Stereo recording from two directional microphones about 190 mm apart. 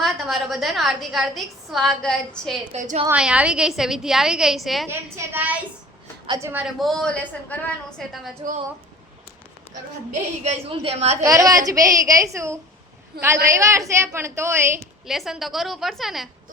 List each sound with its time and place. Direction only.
0.0 s a woman's voice: centre (ahead or behind)
2.7 s a woman's voice: 40° right (ahead or behind)
3.1 s a woman's voice: 5° right (ahead or behind)
4.9 s a woman's voice: 10° right (ahead or behind)
10.4 s a woman's voice: 30° right (ahead or behind)
11.2 s a woman's voice: 15° right (ahead or behind)
13.1 s a woman's voice: 55° right (ahead or behind)
13.5 s a woman's voice: 15° right (ahead or behind)
15.0 s a woman's voice: centre (ahead or behind)